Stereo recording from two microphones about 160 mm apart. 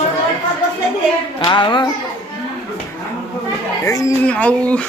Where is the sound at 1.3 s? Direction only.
30° left (ahead or behind).